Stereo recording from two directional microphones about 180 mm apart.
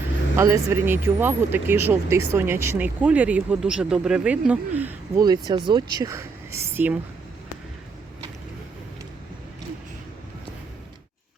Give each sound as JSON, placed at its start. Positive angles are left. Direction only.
{"t": 0.3, "sound": "speech", "side_deg": -15}
{"t": 5.2, "sound": "speech", "side_deg": -25}